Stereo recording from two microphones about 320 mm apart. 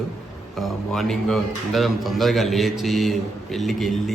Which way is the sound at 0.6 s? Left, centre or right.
Centre.